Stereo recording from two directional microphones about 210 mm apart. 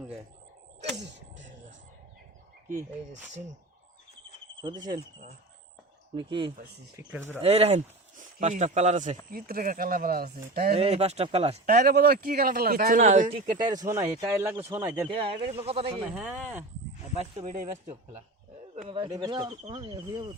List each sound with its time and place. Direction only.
3.1 s speech: 35° right (ahead or behind)
4.6 s speech: 20° right (ahead or behind)
6.1 s speech: 25° right (ahead or behind)
7.0 s speech: 10° right (ahead or behind)
7.4 s speech: 30° right (ahead or behind); by 10.8 s 45° right (ahead or behind)
10.8 s speech: 30° right (ahead or behind)
11.6 s speech: 45° right (ahead or behind)
13.8 s speech: 15° right (ahead or behind)
15.1 s speech: 25° right (ahead or behind)
16.1 s speech: 10° right (ahead or behind)
18.9 s speech: 25° right (ahead or behind)